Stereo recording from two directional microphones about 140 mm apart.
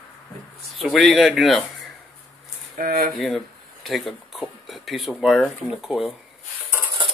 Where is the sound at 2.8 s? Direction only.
80° right.